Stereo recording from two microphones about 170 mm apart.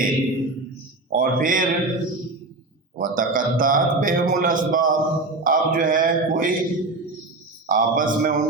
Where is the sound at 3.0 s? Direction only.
55° right (ahead or behind).